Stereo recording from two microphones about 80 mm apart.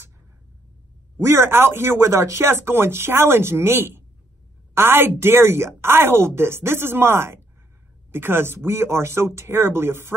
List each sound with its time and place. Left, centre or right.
1.2 s speech: right